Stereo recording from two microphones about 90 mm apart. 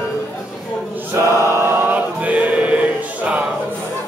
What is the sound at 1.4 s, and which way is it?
Chant, 25° right (ahead or behind).